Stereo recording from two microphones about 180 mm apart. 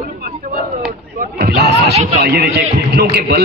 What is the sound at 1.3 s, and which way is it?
A man's voice, 65° right (ahead or behind).